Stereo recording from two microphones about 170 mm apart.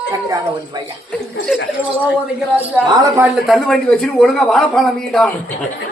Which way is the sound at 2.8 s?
25° right (ahead or behind).